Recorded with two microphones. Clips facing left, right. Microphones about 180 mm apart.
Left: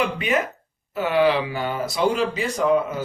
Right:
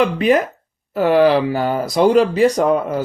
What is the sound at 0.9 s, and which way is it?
Speech, 40° right (ahead or behind).